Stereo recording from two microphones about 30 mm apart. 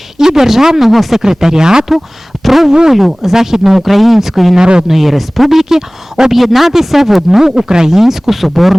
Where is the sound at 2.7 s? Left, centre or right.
Centre.